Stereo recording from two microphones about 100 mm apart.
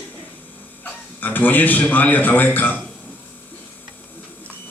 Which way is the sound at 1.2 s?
15° left (ahead or behind).